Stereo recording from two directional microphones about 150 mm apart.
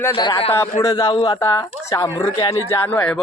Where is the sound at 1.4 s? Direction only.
15° left (ahead or behind).